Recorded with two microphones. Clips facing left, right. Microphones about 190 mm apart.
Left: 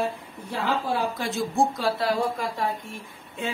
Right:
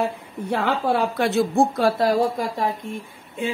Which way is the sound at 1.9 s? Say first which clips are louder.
Right 5 dB; 45° right (ahead or behind).